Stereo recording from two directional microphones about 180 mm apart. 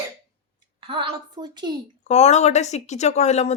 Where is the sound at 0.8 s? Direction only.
30° right (ahead or behind).